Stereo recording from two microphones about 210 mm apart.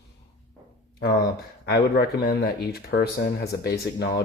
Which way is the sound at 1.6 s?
45° left (ahead or behind).